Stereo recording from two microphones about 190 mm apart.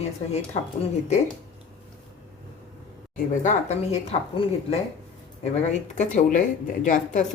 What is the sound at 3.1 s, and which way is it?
Speech, 40° left (ahead or behind).